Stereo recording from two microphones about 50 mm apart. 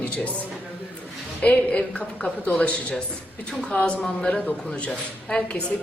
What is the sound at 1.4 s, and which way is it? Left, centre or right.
A man's voice, left.